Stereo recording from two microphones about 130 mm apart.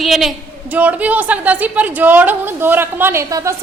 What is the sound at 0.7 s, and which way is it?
A woman's voice, 10° right (ahead or behind).